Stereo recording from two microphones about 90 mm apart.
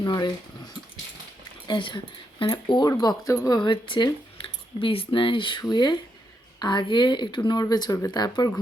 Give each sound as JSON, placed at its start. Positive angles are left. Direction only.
{"t": 0.0, "sound": "speech", "side_deg": 50}
{"t": 1.6, "sound": "speech", "side_deg": 60}
{"t": 3.2, "sound": "speech", "side_deg": 40}
{"t": 3.6, "sound": "speech", "side_deg": 65}